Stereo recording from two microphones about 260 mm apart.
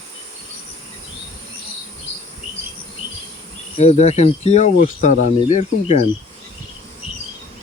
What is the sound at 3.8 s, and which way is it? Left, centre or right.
Speech, left.